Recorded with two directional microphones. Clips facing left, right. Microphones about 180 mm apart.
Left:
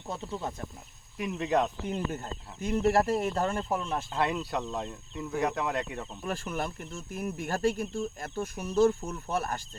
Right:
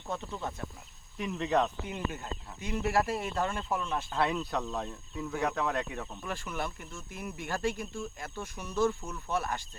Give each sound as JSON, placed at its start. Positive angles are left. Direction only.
{"t": 0.3, "sound": "speech", "side_deg": 30}
{"t": 1.2, "sound": "speech", "side_deg": 10}
{"t": 1.9, "sound": "speech", "side_deg": 45}
{"t": 4.1, "sound": "speech", "side_deg": 10}
{"t": 6.2, "sound": "speech", "side_deg": 45}